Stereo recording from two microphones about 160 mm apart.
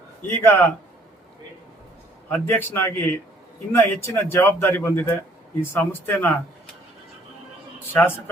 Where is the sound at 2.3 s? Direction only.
15° left (ahead or behind).